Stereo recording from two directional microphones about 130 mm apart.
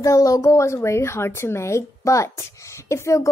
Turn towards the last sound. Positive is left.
turn(degrees=20)  # may be behind; listen again after turning